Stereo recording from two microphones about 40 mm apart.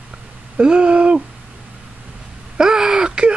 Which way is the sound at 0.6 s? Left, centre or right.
Right.